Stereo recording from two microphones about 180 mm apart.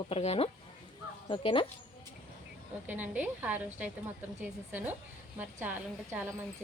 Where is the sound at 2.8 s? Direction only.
10° right (ahead or behind).